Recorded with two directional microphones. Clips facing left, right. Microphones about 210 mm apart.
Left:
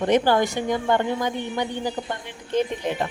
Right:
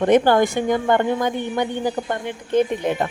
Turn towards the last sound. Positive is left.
turn(degrees=-55)  # may be behind; listen again after turning